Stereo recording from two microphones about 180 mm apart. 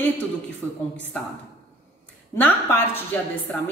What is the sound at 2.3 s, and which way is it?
A woman's voice, 10° left (ahead or behind).